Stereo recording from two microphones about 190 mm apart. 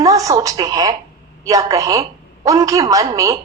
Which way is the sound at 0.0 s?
20° right (ahead or behind).